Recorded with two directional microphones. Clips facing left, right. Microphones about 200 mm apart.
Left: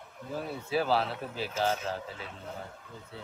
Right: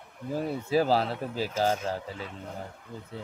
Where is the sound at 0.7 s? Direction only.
40° right (ahead or behind).